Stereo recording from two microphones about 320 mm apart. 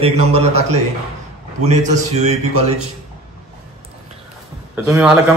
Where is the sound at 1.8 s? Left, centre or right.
Right.